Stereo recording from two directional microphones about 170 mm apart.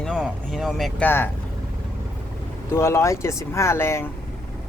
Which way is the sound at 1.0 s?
10° left (ahead or behind).